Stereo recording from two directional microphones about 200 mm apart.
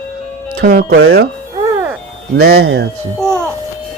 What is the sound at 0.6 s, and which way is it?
Speech, 50° right (ahead or behind).